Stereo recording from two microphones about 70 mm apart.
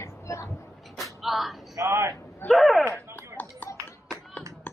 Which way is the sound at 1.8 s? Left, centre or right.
Right.